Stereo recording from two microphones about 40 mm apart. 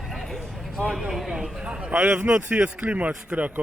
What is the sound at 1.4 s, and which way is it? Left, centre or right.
A man's voice, centre.